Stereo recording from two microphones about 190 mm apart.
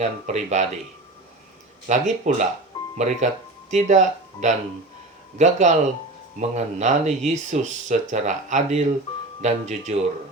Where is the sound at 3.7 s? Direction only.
40° right (ahead or behind).